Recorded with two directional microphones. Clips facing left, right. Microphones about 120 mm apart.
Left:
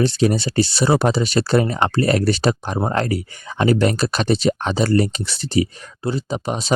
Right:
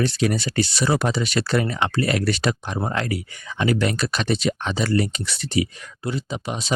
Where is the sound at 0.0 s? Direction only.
30° left (ahead or behind).